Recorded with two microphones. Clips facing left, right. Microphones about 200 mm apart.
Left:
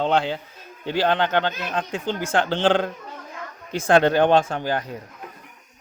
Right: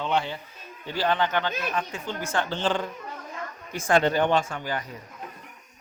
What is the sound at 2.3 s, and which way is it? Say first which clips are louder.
Speech: left 7 dB; 90° left.